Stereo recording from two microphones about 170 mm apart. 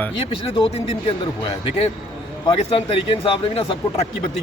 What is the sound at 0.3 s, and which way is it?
Speech, 35° left (ahead or behind).